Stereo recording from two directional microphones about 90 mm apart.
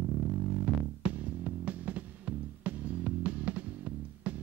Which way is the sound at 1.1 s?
15° right (ahead or behind).